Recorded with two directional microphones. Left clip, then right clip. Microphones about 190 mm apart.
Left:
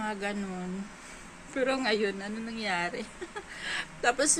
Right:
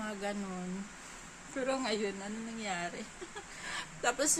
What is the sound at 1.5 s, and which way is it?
A woman's voice, 15° right (ahead or behind).